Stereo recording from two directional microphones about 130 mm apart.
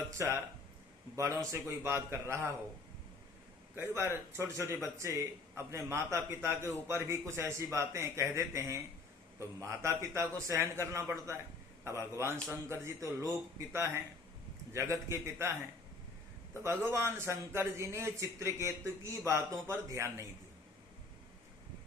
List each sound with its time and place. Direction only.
0.2 s speech: 25° right (ahead or behind)
1.5 s speech: 20° right (ahead or behind)
3.8 s speech: 20° right (ahead or behind)
16.6 s speech: 20° right (ahead or behind)